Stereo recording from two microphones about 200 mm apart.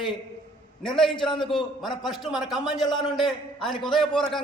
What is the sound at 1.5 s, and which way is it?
A man's voice, centre (ahead or behind).